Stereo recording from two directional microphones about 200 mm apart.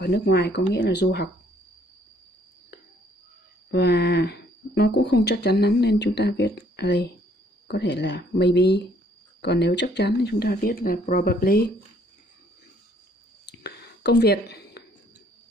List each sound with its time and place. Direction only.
0.0 s speech: 55° left (ahead or behind)
3.7 s speech: 55° left (ahead or behind)
13.5 s whispering: 55° left (ahead or behind)